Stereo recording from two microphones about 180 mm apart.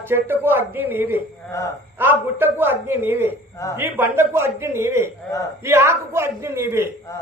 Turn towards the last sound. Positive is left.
turn(degrees=-15)  # may be behind; listen again after turning